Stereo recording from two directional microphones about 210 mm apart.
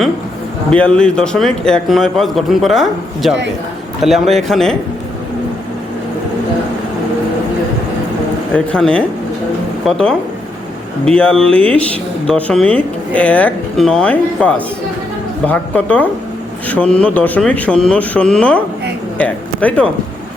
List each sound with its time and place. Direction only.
0.7 s speech: 5° left (ahead or behind)
8.5 s speech: 5° left (ahead or behind)